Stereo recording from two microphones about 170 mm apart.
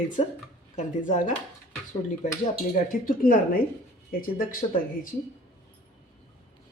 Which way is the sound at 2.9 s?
55° left (ahead or behind).